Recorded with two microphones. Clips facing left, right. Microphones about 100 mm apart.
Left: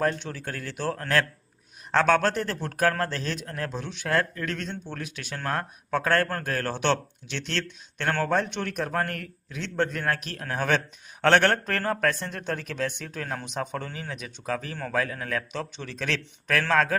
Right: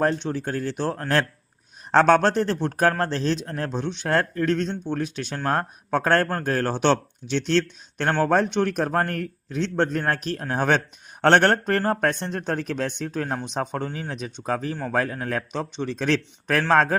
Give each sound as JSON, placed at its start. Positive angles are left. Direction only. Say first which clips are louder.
{"t": 0.0, "sound": "speech", "louder": "right 4 dB", "side_deg": -30}
{"t": 11.2, "sound": "speech", "louder": "right 3 dB", "side_deg": -45}